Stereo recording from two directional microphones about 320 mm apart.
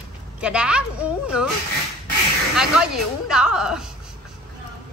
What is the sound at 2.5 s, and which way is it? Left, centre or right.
A woman's voice, centre.